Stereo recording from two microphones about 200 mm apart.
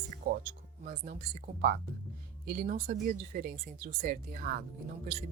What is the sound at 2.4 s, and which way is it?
Speech, 45° right (ahead or behind).